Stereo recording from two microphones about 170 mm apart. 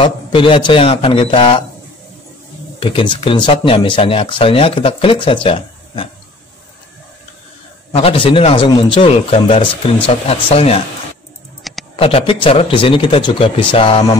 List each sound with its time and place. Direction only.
0.0 s a man's voice: 30° left (ahead or behind)
2.8 s speech: 30° left (ahead or behind)
7.9 s speech: 35° left (ahead or behind)
11.7 s a sound: centre (ahead or behind)
12.0 s speech: 35° left (ahead or behind)